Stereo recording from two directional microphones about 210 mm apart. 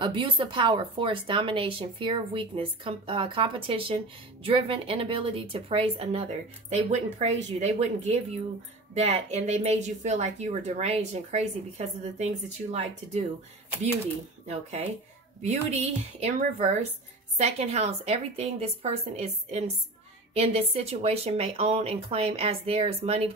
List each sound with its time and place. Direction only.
0.0 s a woman's voice: 25° right (ahead or behind)
14.5 s a woman's voice: 30° right (ahead or behind)